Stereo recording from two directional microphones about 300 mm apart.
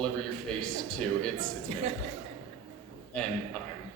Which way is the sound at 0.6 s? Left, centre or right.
Centre.